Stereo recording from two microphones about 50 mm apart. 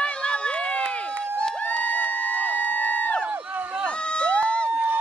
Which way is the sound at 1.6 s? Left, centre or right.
Left.